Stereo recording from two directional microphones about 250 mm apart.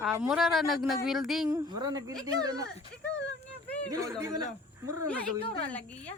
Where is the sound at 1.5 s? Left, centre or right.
Centre.